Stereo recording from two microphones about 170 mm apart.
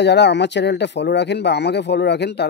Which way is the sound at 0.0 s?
90° left.